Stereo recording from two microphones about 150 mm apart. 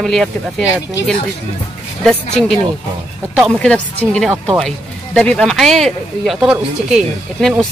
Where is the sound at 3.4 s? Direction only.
5° left (ahead or behind).